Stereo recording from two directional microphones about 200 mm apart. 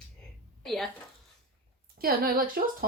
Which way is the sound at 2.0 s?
50° right (ahead or behind).